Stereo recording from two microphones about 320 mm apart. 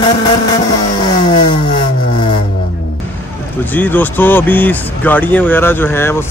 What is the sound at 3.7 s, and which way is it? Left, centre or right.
Speech, centre.